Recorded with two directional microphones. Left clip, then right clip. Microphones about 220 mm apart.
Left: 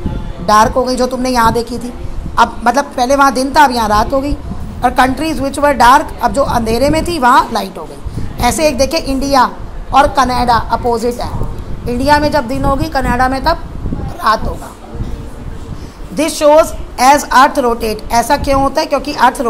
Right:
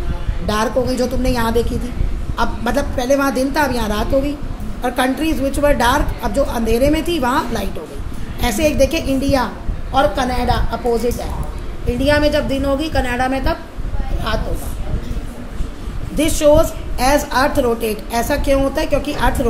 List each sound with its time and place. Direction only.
0.5 s a woman's voice: 20° left (ahead or behind)
16.2 s a woman's voice: 15° left (ahead or behind)